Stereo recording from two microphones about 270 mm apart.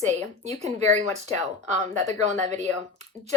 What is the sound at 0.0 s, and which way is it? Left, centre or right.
A woman's voice, right.